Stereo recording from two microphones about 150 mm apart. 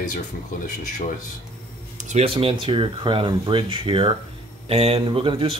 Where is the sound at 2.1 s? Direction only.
40° right (ahead or behind).